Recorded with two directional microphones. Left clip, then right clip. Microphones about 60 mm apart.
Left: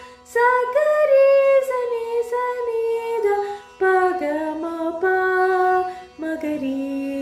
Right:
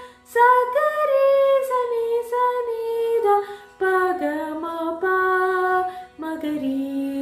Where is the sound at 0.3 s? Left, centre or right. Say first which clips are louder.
Right 2 dB; left.